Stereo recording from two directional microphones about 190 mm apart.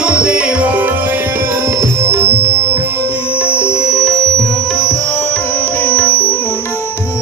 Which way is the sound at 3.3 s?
5° right (ahead or behind).